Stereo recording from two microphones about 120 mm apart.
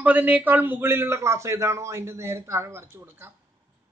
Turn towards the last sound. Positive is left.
turn(degrees=-20)  # may be behind; listen again after turning